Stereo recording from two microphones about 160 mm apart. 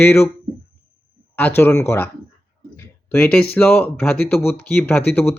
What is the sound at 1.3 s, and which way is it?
Speech, 10° left (ahead or behind).